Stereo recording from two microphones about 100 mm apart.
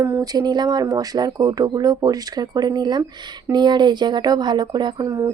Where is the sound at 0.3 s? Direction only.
45° right (ahead or behind).